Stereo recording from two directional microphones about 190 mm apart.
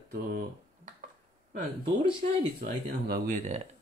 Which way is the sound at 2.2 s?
40° right (ahead or behind).